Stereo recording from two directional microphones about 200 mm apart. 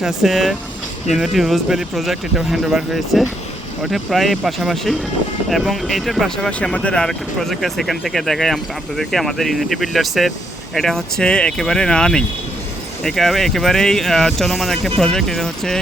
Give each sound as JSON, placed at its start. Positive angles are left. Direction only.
{"t": 0.0, "sound": "speech", "side_deg": 0}